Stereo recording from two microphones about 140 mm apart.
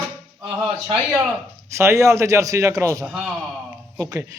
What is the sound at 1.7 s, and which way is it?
A man's voice, 20° right (ahead or behind).